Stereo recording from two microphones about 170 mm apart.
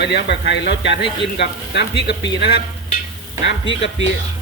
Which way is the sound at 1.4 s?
80° left.